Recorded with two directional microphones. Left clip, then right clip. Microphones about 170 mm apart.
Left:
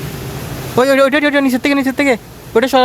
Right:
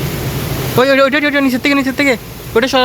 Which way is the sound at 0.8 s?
25° left (ahead or behind).